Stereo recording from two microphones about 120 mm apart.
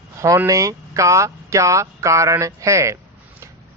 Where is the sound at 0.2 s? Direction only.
25° right (ahead or behind).